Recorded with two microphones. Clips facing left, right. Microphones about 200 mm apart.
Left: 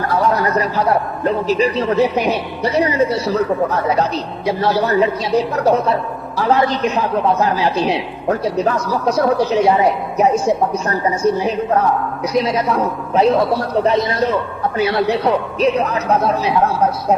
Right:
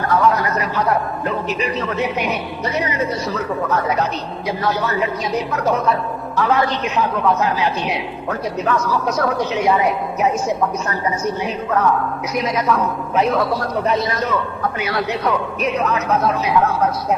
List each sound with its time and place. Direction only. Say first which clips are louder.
0.1 s a man's voice: even; 35° left (ahead or behind)